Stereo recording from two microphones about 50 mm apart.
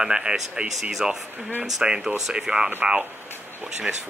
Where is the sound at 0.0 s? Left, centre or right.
Centre.